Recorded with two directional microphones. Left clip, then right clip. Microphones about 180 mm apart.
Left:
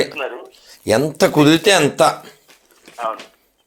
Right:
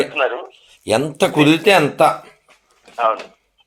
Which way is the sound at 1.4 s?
35° left (ahead or behind).